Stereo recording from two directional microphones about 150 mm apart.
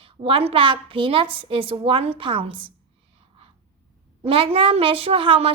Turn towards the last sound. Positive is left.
turn(degrees=-40)  # may be behind; listen again after turning